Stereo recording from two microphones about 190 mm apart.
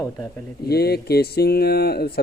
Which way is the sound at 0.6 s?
55° left (ahead or behind).